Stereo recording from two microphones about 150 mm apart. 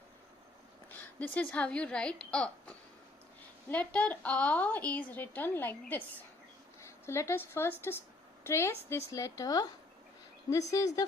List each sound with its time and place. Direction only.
0.9 s a woman's voice: 10° left (ahead or behind)
7.0 s a woman's voice: 15° left (ahead or behind)
10.7 s a woman's voice: 20° left (ahead or behind)